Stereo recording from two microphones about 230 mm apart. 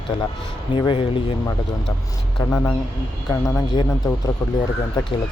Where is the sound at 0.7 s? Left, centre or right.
Left.